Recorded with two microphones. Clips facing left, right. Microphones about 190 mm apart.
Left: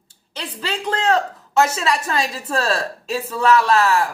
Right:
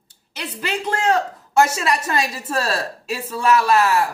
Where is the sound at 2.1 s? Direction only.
10° right (ahead or behind).